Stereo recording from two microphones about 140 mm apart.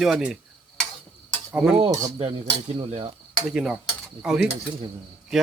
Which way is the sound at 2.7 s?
40° right (ahead or behind).